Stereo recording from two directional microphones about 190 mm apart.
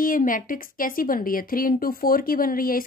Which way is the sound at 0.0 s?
45° left (ahead or behind).